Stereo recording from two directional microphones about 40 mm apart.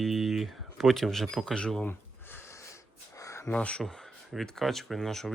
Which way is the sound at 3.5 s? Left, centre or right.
Left.